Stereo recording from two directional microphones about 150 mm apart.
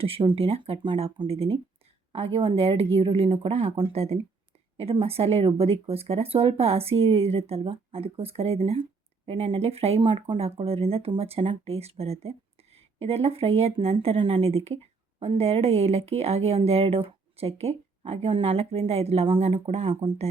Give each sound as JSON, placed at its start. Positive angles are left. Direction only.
{"t": 0.0, "sound": "speech", "side_deg": -40}